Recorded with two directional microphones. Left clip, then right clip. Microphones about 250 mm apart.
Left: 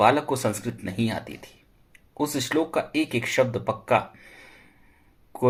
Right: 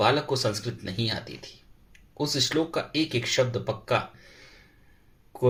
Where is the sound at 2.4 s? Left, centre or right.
Left.